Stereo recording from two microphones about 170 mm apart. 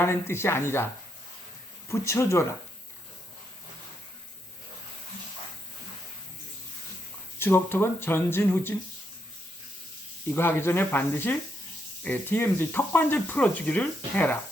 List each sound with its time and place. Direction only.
0.0 s speech: 15° left (ahead or behind)
1.9 s speech: 15° left (ahead or behind)
7.3 s speech: 15° left (ahead or behind)
10.2 s speech: 15° left (ahead or behind)